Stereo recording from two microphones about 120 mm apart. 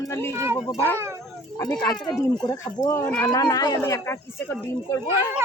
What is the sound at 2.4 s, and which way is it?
Speech, 30° left (ahead or behind).